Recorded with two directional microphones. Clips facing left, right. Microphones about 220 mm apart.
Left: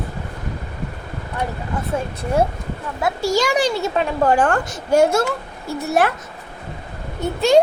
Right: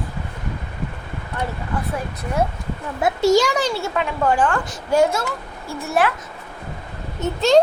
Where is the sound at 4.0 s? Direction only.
40° left (ahead or behind).